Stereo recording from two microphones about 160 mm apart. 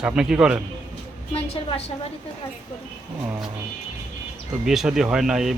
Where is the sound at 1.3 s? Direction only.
35° left (ahead or behind).